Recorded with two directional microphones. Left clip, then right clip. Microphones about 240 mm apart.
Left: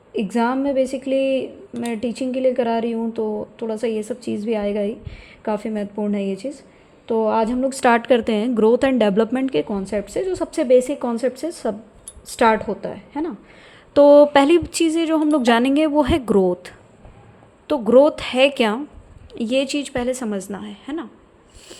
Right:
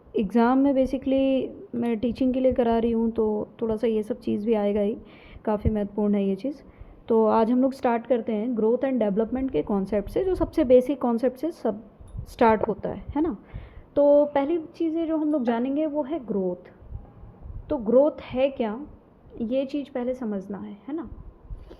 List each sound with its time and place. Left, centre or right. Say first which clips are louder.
0.1 s a woman's voice: left 1 dB; centre
7.8 s speech: left 8 dB; centre
9.6 s a woman's voice: left 2 dB; centre
13.9 s speech: left 8 dB; left
17.7 s a woman's voice: left 7 dB; centre